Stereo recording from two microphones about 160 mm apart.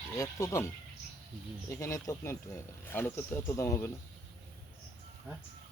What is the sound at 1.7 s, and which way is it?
Speech, 20° left (ahead or behind).